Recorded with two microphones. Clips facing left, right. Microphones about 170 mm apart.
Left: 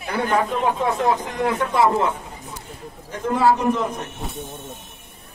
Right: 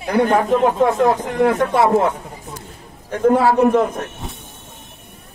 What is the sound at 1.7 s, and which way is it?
A man's voice, 65° right (ahead or behind).